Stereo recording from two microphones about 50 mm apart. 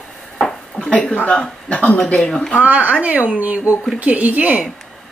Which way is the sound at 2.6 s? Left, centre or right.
Right.